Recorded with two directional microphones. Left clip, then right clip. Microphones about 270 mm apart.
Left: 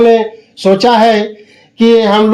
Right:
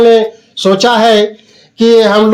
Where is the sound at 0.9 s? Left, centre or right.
Right.